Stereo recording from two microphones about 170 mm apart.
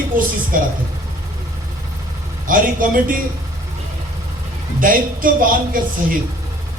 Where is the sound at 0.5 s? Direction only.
55° right (ahead or behind).